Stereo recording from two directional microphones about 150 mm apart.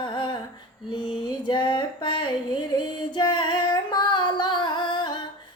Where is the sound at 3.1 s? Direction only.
30° left (ahead or behind).